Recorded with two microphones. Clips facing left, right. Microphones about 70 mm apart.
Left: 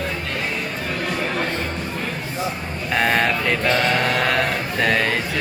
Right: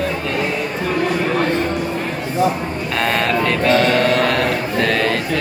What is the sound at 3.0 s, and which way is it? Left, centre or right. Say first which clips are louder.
Mantra: right 2 dB; centre.